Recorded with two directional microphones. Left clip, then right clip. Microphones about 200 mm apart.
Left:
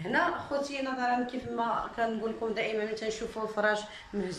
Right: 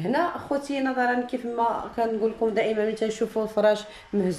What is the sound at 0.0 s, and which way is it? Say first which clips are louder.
A woman's voice: right 3 dB; 30° right (ahead or behind).